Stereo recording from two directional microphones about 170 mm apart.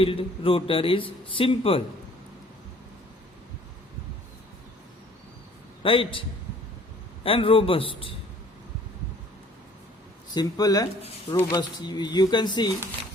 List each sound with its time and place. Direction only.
0.0 s speech: 30° left (ahead or behind)
5.8 s speech: 30° left (ahead or behind)
7.3 s speech: 30° left (ahead or behind)
10.3 s speech: 20° left (ahead or behind)